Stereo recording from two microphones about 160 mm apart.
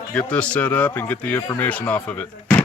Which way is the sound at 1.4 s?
20° left (ahead or behind).